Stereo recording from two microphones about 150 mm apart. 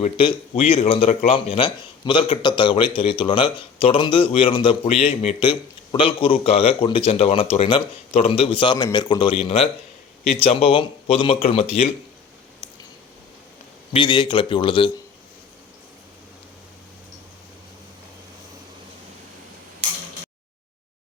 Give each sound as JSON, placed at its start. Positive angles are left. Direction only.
{"t": 0.0, "sound": "speech", "side_deg": 40}
{"t": 13.9, "sound": "speech", "side_deg": 35}